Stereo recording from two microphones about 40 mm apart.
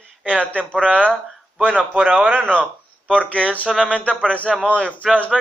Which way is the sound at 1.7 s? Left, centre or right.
Right.